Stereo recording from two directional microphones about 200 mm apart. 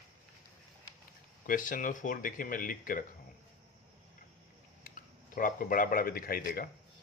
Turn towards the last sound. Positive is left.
turn(degrees=50)  # may be behind; listen again after turning